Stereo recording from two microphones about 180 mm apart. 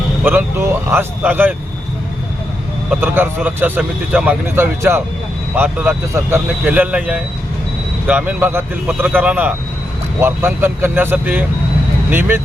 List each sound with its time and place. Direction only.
0.3 s speech: 10° right (ahead or behind)
2.9 s speech: 10° right (ahead or behind)